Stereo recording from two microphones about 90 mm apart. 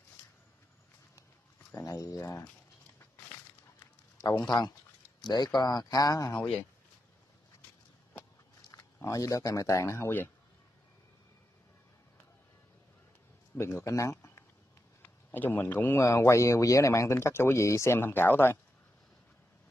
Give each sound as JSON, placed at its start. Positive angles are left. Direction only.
{"t": 1.8, "sound": "speech", "side_deg": 40}
{"t": 4.5, "sound": "speech", "side_deg": 55}
{"t": 8.7, "sound": "speech", "side_deg": 35}
{"t": 13.6, "sound": "speech", "side_deg": 30}
{"t": 14.1, "sound": "a sound", "side_deg": 30}
{"t": 15.0, "sound": "a man's voice", "side_deg": 20}
{"t": 16.0, "sound": "speech", "side_deg": 35}